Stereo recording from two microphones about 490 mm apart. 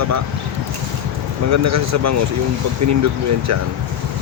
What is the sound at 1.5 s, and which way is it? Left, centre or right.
Speech, right.